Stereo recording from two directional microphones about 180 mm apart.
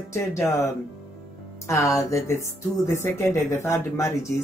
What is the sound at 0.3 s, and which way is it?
Speech, 15° left (ahead or behind).